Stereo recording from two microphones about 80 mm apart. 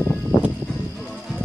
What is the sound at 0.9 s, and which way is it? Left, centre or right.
Music, centre.